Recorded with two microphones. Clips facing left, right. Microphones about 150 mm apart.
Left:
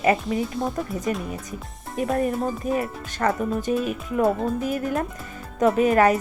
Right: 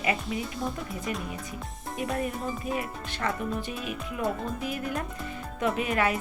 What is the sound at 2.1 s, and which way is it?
A woman's voice, 45° left (ahead or behind).